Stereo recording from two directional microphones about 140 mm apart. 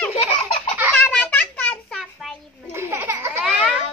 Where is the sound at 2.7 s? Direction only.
20° right (ahead or behind).